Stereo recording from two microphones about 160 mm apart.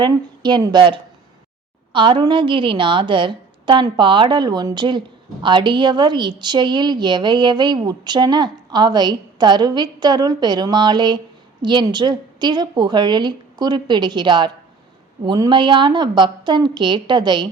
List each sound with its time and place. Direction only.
0.0 s a woman's voice: 30° right (ahead or behind)